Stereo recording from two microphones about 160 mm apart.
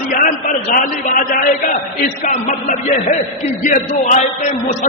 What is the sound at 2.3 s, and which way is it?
A man's voice, 55° left (ahead or behind).